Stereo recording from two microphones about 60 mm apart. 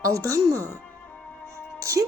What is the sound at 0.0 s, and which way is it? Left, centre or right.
Speech, right.